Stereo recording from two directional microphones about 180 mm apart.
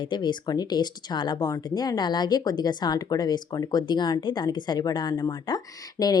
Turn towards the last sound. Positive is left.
turn(degrees=20)  # may be behind; listen again after turning